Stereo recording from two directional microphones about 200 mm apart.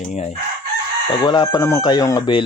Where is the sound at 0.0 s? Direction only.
35° left (ahead or behind).